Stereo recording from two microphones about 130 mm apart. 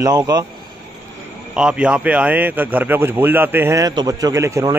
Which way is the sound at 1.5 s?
5° right (ahead or behind).